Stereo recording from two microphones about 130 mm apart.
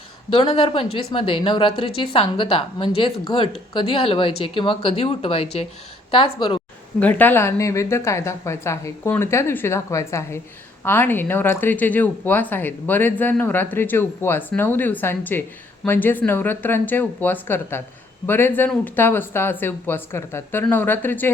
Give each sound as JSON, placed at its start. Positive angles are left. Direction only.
{"t": 0.3, "sound": "speech", "side_deg": 45}
{"t": 7.0, "sound": "a woman's voice", "side_deg": 15}